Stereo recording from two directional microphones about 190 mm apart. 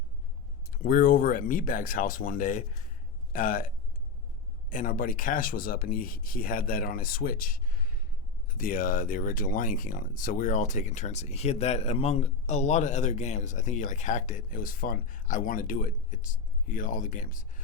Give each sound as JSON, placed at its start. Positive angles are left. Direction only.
{"t": 0.7, "sound": "speech", "side_deg": 50}
{"t": 4.7, "sound": "speech", "side_deg": 45}